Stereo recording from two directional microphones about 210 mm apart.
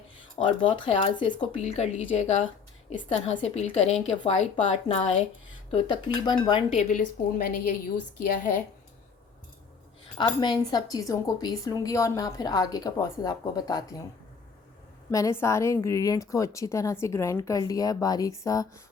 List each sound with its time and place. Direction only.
0.3 s a woman's voice: 25° left (ahead or behind)
6.7 s a woman's voice: 40° left (ahead or behind)
10.2 s speech: 20° left (ahead or behind)
15.1 s speech: 15° left (ahead or behind)